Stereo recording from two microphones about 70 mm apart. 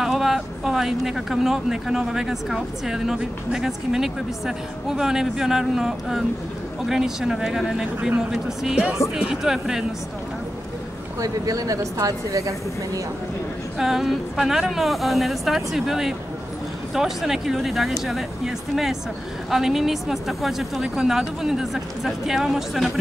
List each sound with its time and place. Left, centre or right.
0.0 s speech: centre
11.1 s a woman's voice: right
13.7 s speech: centre